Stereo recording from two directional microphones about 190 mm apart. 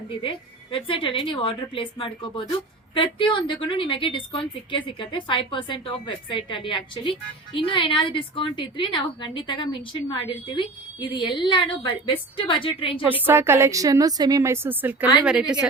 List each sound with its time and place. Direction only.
0.2 s a woman's voice: 25° left (ahead or behind)
13.1 s a woman's voice: 10° right (ahead or behind)